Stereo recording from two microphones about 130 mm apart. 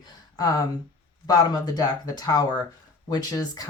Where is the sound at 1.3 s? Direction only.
30° left (ahead or behind).